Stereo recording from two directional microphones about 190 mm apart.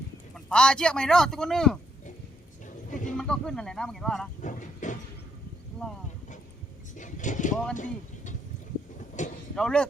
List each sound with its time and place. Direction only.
0.3 s speech: 5° left (ahead or behind)
2.6 s a sound: 40° left (ahead or behind)
3.2 s speech: 5° left (ahead or behind)
4.4 s speech: 40° left (ahead or behind)
6.9 s speech: 40° left (ahead or behind)
7.8 s a sound: 40° left (ahead or behind)
9.2 s vehicle: 40° left (ahead or behind)
9.6 s speech: 5° left (ahead or behind)